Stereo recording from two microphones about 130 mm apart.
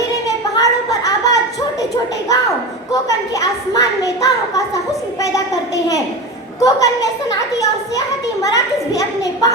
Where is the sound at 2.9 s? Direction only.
25° left (ahead or behind).